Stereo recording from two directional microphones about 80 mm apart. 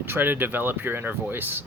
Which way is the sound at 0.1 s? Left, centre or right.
Right.